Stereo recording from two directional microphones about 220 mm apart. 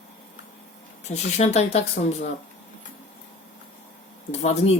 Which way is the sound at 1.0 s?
30° left (ahead or behind).